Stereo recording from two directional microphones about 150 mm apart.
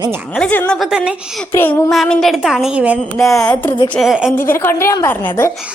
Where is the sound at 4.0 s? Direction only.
Centre (ahead or behind).